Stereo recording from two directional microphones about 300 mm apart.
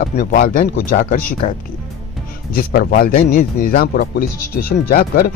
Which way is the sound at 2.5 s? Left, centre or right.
Left.